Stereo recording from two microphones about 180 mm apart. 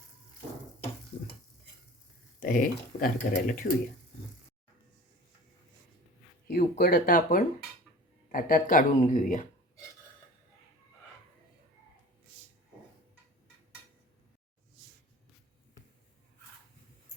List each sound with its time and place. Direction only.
2.4 s speech: 50° left (ahead or behind)
6.5 s speech: 55° left (ahead or behind)